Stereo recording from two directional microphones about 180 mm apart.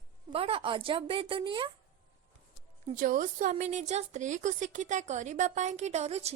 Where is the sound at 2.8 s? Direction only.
45° right (ahead or behind).